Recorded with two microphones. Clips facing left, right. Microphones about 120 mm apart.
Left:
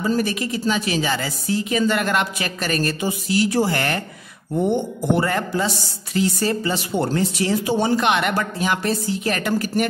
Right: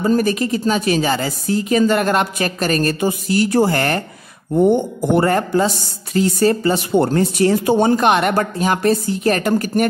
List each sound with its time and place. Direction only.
0.0 s speech: 45° right (ahead or behind)